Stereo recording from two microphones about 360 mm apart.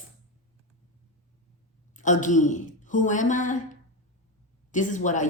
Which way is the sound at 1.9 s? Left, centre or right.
Left.